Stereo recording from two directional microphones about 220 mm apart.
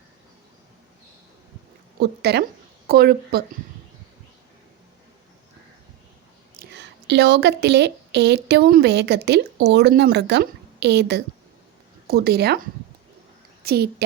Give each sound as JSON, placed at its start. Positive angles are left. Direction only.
{"t": 2.0, "sound": "speech", "side_deg": -50}
{"t": 6.6, "sound": "a woman's voice", "side_deg": -50}
{"t": 13.6, "sound": "a woman's voice", "side_deg": -45}